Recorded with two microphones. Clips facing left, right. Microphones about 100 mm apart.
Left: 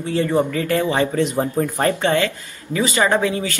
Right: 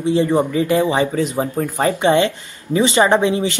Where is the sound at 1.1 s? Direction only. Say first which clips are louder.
Even; 5° right (ahead or behind).